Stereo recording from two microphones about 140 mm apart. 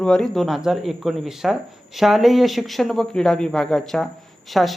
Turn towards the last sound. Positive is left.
turn(degrees=0)  # may be behind; listen again after turning